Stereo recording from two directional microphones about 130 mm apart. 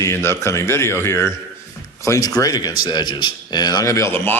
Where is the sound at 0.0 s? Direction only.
20° left (ahead or behind).